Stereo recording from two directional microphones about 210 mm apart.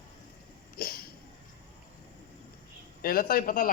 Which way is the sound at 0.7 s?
45° left (ahead or behind).